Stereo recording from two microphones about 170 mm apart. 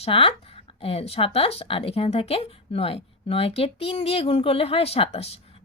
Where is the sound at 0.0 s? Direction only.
35° left (ahead or behind).